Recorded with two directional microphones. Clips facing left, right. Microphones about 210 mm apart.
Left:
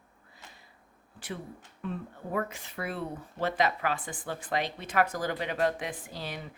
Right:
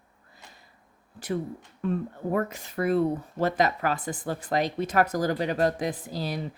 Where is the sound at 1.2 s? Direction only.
40° right (ahead or behind).